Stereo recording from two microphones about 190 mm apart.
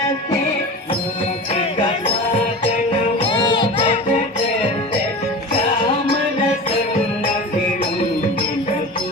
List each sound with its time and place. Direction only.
3.2 s music: 25° left (ahead or behind)